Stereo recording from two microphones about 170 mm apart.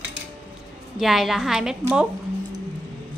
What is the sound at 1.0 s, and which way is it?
Speech, centre (ahead or behind).